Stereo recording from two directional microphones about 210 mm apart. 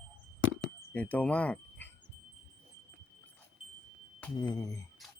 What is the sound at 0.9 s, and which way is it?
Speech, 5° left (ahead or behind).